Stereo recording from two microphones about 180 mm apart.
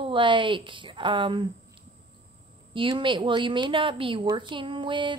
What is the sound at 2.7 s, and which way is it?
A woman's voice, 25° right (ahead or behind).